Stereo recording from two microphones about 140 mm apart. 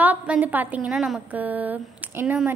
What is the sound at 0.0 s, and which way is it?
A woman's voice, 10° right (ahead or behind).